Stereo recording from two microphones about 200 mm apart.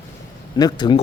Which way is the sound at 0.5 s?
20° left (ahead or behind).